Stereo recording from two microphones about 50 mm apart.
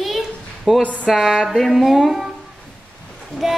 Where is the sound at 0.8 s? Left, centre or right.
Left.